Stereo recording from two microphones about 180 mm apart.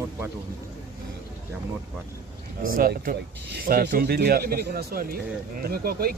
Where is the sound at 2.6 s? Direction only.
55° right (ahead or behind).